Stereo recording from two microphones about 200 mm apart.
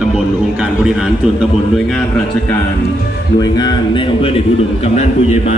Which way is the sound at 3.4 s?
20° left (ahead or behind).